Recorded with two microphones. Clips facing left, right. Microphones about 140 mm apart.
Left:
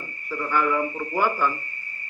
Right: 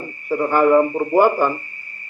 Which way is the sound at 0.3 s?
45° right (ahead or behind).